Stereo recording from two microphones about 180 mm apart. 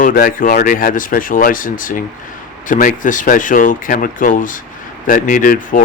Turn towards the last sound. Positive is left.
turn(degrees=50)  # may be behind; listen again after turning